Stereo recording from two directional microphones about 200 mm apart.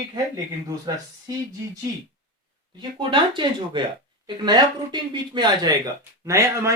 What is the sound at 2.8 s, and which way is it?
Speech, 25° right (ahead or behind).